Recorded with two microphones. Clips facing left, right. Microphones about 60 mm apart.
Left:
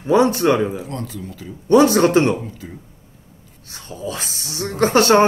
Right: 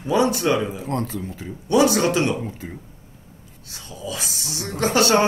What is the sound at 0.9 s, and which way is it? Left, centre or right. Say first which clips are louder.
Speech: right 3 dB; right.